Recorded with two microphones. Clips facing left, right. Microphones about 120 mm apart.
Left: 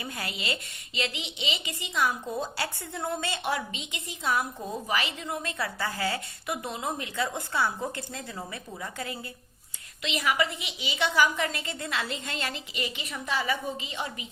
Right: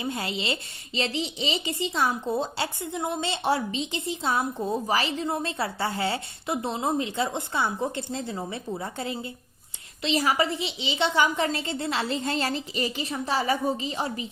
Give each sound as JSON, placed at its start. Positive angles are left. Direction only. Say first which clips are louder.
{"t": 0.0, "sound": "a woman's voice", "louder": "right 6 dB", "side_deg": -25}